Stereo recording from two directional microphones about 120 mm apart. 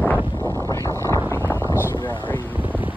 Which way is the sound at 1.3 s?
20° left (ahead or behind).